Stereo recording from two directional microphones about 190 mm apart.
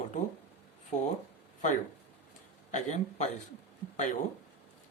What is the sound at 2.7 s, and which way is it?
Speech, 40° left (ahead or behind).